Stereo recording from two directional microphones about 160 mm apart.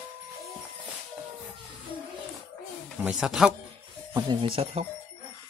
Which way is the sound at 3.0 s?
5° right (ahead or behind).